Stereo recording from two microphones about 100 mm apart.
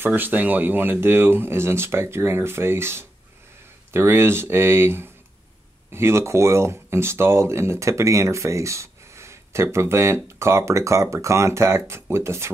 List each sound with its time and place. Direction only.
0.0 s speech: 20° right (ahead or behind)